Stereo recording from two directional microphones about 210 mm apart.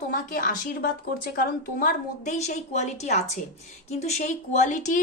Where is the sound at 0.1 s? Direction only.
40° left (ahead or behind).